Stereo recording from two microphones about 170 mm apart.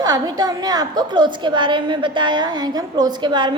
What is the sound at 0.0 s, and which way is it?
A woman's voice, 25° right (ahead or behind).